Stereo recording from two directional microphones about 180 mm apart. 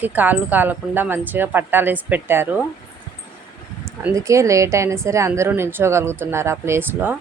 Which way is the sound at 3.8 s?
15° right (ahead or behind).